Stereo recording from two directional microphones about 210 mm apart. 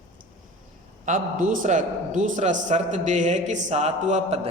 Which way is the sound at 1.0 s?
40° right (ahead or behind).